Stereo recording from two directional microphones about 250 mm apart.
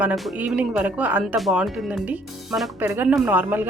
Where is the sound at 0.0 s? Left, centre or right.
Centre.